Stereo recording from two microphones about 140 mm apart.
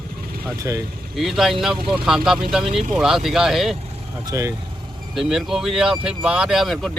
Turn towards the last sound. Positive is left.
turn(degrees=0)  # may be behind; listen again after turning